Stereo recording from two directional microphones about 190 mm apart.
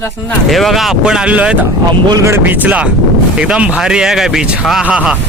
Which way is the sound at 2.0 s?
20° right (ahead or behind).